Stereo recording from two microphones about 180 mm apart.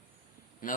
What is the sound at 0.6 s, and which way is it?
Speech, 50° left (ahead or behind).